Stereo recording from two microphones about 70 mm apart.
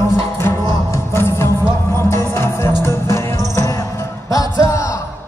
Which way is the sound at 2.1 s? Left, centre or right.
Left.